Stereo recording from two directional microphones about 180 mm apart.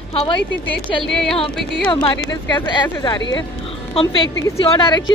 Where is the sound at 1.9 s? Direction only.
30° left (ahead or behind).